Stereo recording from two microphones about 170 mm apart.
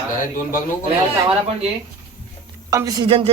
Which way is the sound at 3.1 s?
35° right (ahead or behind).